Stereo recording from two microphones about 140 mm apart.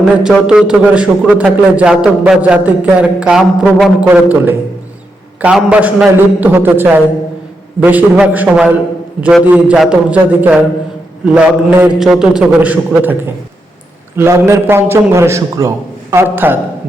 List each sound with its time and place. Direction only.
0.0 s a man's voice: 5° right (ahead or behind)
4.0 s a man's voice: 10° right (ahead or behind)
14.2 s a man's voice: 15° right (ahead or behind)